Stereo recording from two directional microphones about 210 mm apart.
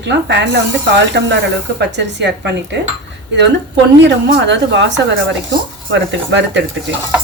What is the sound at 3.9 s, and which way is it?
Speech, 55° right (ahead or behind).